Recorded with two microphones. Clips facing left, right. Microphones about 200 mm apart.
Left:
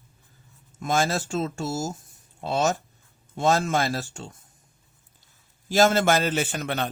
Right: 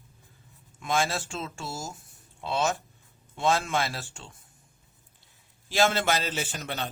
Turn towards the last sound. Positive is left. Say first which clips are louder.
# left 6 dB
turn(degrees=60)  # may be behind; listen again after turning